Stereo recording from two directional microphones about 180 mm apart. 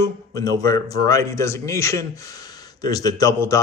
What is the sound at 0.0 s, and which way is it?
Speech, 20° left (ahead or behind).